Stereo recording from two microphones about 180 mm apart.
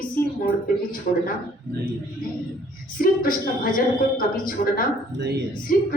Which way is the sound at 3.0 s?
50° left (ahead or behind).